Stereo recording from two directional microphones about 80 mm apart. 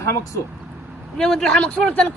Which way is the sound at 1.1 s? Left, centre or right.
Centre.